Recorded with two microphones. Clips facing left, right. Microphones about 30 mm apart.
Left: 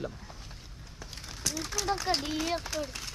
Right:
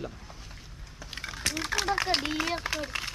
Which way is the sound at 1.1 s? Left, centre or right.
Right.